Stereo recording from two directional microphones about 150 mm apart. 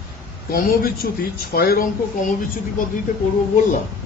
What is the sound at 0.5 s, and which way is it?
A man's voice, 75° left (ahead or behind).